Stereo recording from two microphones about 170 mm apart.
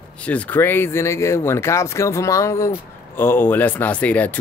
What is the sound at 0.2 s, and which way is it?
Speech, 10° left (ahead or behind).